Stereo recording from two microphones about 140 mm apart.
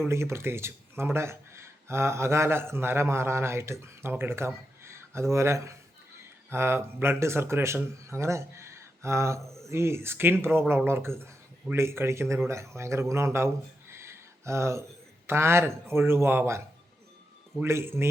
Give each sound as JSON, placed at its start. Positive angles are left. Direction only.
{"t": 0.0, "sound": "speech", "side_deg": -20}